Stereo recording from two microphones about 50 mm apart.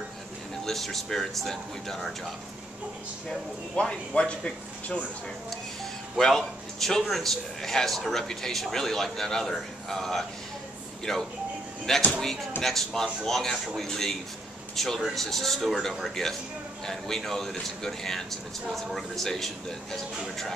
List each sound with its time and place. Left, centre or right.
0.7 s speech: centre
3.3 s speech: centre
6.1 s a man's voice: centre